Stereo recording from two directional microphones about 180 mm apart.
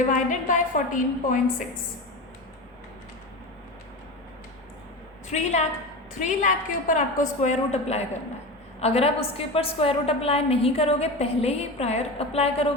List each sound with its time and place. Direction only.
0.1 s a woman's voice: 45° left (ahead or behind)
5.3 s a woman's voice: 40° left (ahead or behind)